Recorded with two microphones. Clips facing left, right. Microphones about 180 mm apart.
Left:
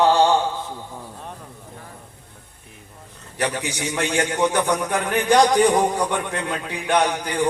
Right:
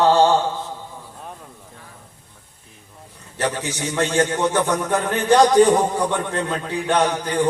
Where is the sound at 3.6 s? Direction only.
15° left (ahead or behind).